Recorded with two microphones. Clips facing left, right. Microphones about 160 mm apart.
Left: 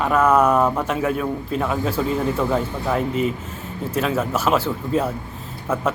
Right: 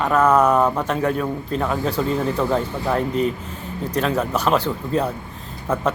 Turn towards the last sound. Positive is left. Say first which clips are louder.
# right 1 dB
turn(degrees=5)  # may be behind; listen again after turning